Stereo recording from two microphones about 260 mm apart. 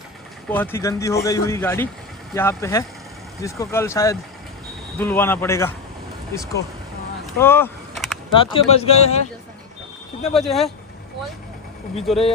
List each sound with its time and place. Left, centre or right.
0.5 s speech: centre
7.3 s a sound: centre
8.5 s speech: left
10.3 s speech: centre
12.1 s speech: centre